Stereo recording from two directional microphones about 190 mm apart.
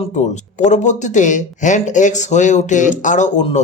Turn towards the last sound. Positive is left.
turn(degrees=40)  # may be behind; listen again after turning